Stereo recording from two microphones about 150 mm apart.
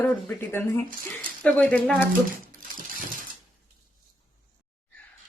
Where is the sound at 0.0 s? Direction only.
10° left (ahead or behind).